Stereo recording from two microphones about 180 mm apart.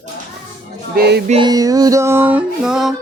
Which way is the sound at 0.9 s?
65° right (ahead or behind).